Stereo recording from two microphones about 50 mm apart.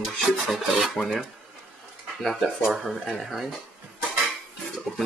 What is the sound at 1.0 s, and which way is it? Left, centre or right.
Speech, left.